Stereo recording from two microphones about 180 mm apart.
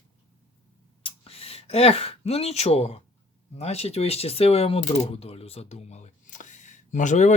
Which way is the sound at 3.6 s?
35° left (ahead or behind).